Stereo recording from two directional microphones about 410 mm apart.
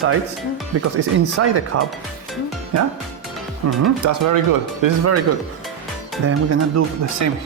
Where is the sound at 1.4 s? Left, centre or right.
Right.